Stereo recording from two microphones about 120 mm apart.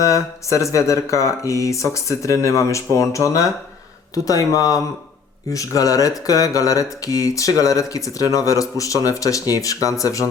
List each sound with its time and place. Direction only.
0.0 s speech: 25° left (ahead or behind)